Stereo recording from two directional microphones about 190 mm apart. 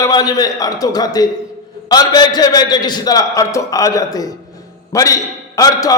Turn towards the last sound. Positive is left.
turn(degrees=20)  # may be behind; listen again after turning